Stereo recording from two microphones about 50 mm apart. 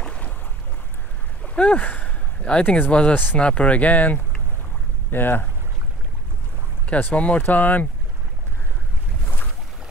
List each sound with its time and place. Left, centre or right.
1.4 s a sound: left
2.5 s speech: left
6.9 s speech: left